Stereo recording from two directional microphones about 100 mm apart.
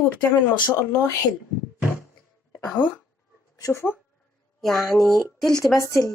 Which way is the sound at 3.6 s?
25° left (ahead or behind).